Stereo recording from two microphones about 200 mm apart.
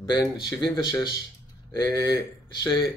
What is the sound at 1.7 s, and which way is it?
Speech, 15° left (ahead or behind).